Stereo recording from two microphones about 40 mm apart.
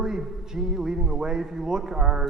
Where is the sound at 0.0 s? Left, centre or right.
Centre.